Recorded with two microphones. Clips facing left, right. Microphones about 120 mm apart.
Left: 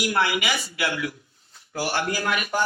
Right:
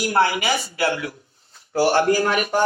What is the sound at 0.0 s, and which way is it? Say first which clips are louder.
A man's voice: right 4 dB; 35° right (ahead or behind).